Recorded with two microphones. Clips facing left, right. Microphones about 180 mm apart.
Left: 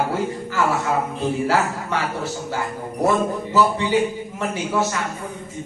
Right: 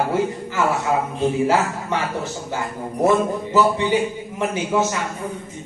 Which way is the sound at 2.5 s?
20° right (ahead or behind).